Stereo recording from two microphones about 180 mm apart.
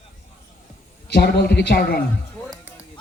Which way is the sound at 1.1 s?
65° left (ahead or behind).